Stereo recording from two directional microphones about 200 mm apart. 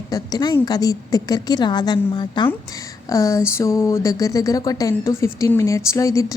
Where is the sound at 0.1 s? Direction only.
20° left (ahead or behind).